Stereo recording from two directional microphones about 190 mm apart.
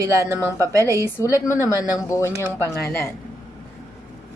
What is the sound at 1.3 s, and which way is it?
Speech, 15° left (ahead or behind).